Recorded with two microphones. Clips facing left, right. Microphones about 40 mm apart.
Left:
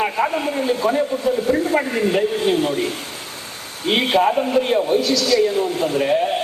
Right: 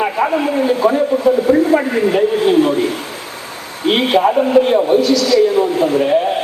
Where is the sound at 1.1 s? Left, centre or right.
Right.